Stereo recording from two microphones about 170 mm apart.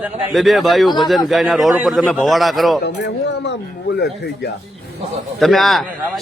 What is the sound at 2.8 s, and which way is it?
Speech, 85° left.